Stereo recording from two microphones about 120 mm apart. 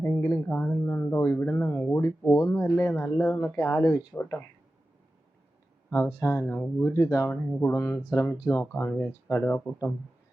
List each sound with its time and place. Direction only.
0.0 s speech: 15° left (ahead or behind)
0.3 s speech: 5° left (ahead or behind)
0.5 s speech: 15° left (ahead or behind)
6.1 s speech: 25° left (ahead or behind)
6.4 s speech: 10° left (ahead or behind)